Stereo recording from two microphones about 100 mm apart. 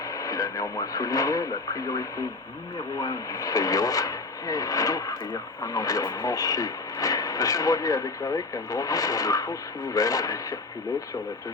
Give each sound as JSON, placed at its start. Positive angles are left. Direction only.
{"t": 0.1, "sound": "speech", "side_deg": 35}